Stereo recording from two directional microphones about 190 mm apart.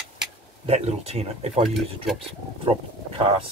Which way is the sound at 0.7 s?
35° right (ahead or behind).